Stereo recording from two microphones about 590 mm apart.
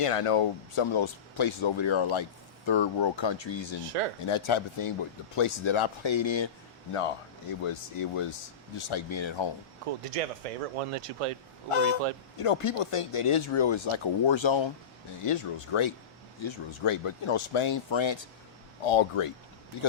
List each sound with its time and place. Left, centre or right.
0.0 s speech: left
7.6 s speech: left
10.0 s speech: right
11.7 s speech: left
18.8 s speech: left